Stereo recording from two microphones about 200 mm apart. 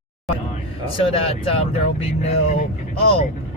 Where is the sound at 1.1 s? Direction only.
30° left (ahead or behind).